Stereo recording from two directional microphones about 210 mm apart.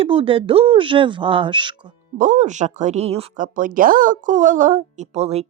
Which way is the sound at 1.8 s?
35° right (ahead or behind).